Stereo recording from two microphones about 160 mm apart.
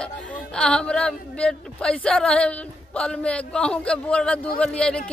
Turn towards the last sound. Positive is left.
turn(degrees=5)  # may be behind; listen again after turning